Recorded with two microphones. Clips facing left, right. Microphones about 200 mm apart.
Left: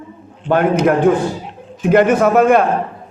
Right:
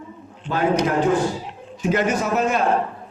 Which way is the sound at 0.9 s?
55° left (ahead or behind).